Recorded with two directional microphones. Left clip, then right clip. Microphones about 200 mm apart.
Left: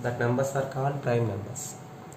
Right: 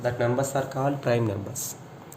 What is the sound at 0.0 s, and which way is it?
Speech, 55° right (ahead or behind).